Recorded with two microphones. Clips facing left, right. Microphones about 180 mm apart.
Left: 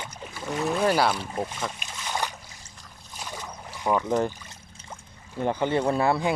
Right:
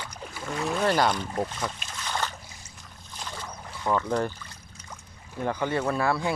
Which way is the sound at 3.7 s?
15° left (ahead or behind).